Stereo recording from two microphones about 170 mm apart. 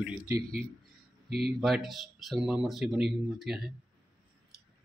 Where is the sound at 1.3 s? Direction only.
70° right (ahead or behind).